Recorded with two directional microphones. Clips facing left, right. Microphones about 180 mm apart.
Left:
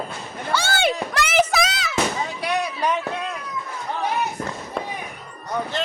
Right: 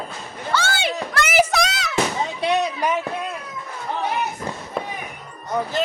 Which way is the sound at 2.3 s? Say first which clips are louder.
Right 6 dB; 25° right (ahead or behind).